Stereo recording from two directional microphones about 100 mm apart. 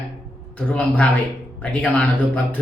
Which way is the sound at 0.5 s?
15° left (ahead or behind).